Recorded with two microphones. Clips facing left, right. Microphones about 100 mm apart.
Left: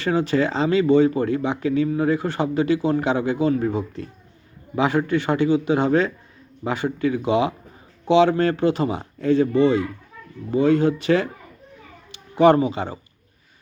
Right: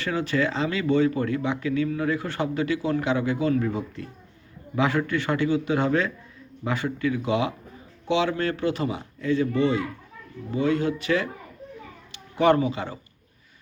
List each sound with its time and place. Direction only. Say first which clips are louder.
0.0 s speech: left 5 dB; 25° left (ahead or behind)